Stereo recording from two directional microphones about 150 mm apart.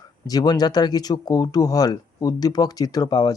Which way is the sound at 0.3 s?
25° left (ahead or behind).